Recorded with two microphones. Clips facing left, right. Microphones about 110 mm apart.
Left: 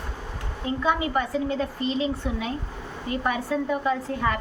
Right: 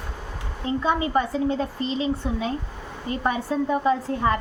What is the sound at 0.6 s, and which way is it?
A woman's voice, 30° right (ahead or behind).